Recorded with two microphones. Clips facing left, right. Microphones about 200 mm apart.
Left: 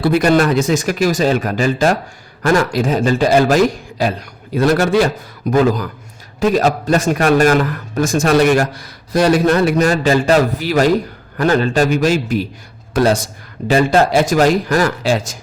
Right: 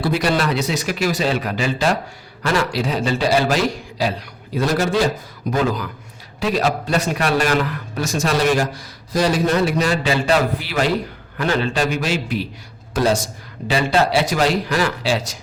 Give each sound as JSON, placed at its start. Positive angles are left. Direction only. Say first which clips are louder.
{"t": 0.0, "sound": "a man's voice", "louder": "left 6 dB", "side_deg": 50}
{"t": 4.5, "sound": "a man's voice", "louder": "left 5 dB", "side_deg": 60}
{"t": 5.5, "sound": "a man's voice", "louder": "left 6 dB", "side_deg": 45}
{"t": 12.9, "sound": "speech", "louder": "left 4 dB", "side_deg": 60}
{"t": 13.7, "sound": "a man's voice", "louder": "left 5 dB", "side_deg": 45}